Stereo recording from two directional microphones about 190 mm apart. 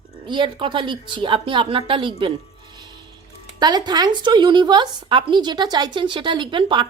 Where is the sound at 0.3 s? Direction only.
25° right (ahead or behind).